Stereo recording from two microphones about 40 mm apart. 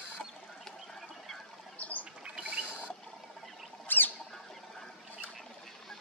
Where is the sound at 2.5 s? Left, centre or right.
Right.